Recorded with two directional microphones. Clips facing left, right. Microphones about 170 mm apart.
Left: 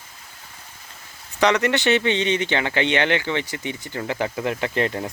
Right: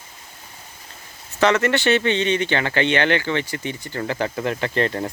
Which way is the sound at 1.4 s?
15° left (ahead or behind).